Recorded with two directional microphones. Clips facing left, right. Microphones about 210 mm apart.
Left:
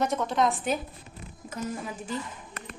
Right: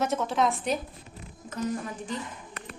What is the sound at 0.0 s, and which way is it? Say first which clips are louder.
Speech: even; 5° right (ahead or behind).